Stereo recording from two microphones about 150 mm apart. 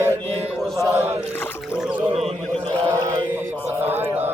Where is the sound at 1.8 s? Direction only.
10° right (ahead or behind).